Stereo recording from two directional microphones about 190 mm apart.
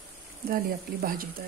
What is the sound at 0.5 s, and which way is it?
Speech, 50° right (ahead or behind).